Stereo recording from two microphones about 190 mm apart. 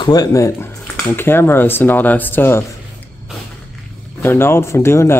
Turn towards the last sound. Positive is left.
turn(degrees=15)  # may be behind; listen again after turning